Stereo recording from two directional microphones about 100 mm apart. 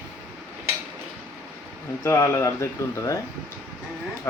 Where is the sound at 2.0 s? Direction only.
25° left (ahead or behind).